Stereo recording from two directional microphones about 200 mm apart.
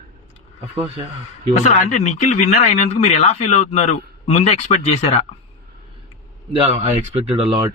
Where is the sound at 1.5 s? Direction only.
35° left (ahead or behind).